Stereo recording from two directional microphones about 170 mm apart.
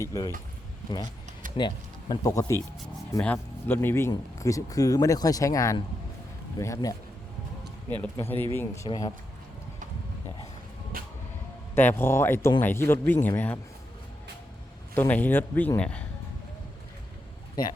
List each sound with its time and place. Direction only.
0.0 s speech: 20° left (ahead or behind)
1.5 s speech: 25° left (ahead or behind)
8.1 s speech: 15° left (ahead or behind)
11.7 s speech: 10° left (ahead or behind)
14.9 s speech: 10° left (ahead or behind)